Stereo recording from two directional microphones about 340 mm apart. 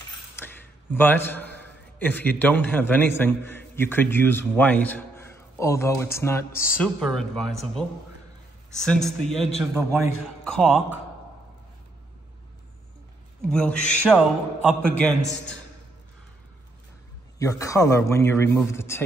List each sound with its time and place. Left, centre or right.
0.4 s a man's voice: centre
8.7 s a man's voice: centre
13.4 s a man's voice: centre
17.4 s a man's voice: centre